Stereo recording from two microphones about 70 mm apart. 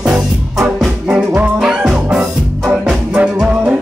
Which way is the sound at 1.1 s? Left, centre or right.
Right.